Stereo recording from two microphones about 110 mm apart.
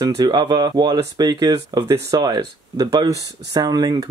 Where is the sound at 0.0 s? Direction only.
40° right (ahead or behind).